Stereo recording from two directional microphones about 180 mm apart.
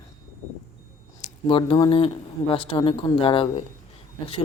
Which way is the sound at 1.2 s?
30° left (ahead or behind).